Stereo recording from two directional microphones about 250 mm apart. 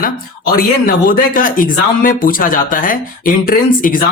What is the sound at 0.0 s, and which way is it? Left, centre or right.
A man's voice, left.